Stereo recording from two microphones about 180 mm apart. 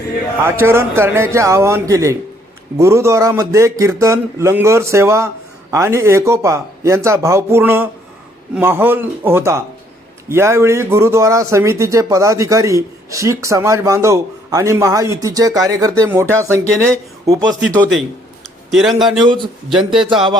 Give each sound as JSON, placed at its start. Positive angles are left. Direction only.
{"t": 0.6, "sound": "speech", "side_deg": -15}
{"t": 18.7, "sound": "speech", "side_deg": 0}